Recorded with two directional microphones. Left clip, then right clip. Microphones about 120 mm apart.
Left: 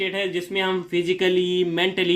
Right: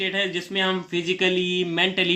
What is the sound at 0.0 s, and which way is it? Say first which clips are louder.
Speech: even; 20° left (ahead or behind).